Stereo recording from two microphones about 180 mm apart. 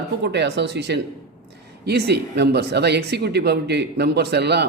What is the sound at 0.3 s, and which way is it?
Speech, 70° right (ahead or behind).